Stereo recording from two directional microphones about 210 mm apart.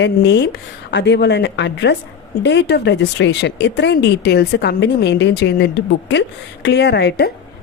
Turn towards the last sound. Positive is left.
turn(degrees=50)  # may be behind; listen again after turning